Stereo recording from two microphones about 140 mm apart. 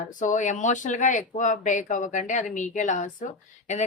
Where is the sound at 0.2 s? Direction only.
60° left (ahead or behind).